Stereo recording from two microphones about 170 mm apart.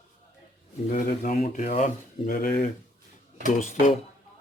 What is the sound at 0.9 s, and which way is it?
Speech, 50° left (ahead or behind).